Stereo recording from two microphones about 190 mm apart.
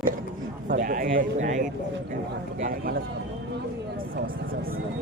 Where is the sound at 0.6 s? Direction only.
45° right (ahead or behind).